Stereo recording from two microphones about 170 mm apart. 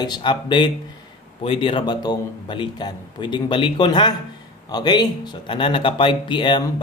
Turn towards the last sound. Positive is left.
turn(degrees=30)  # may be behind; listen again after turning